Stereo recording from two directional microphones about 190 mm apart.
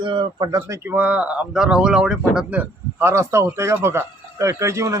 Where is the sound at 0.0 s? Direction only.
25° right (ahead or behind).